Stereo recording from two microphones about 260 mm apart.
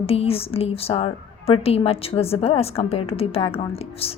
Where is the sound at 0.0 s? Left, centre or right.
Left.